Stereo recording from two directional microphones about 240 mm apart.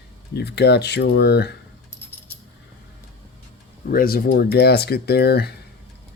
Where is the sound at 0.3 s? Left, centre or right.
Left.